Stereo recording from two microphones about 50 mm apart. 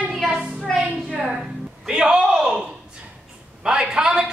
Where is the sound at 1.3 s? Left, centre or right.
Centre.